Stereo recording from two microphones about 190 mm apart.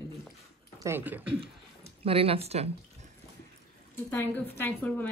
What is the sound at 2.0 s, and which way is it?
Speech, 30° right (ahead or behind).